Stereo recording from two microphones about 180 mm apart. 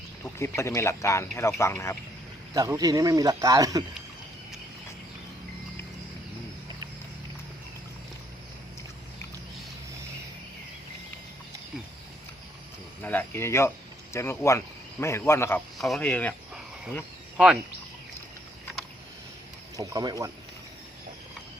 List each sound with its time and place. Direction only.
0.3 s speech: 15° left (ahead or behind)
2.5 s speech: 20° right (ahead or behind)
13.0 s cricket: 10° left (ahead or behind)
14.1 s speech: 15° left (ahead or behind)
17.3 s speech: 5° right (ahead or behind)
19.7 s speech: 20° right (ahead or behind)